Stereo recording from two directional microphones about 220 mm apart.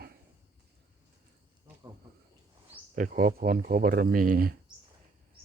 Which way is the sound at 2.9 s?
35° right (ahead or behind).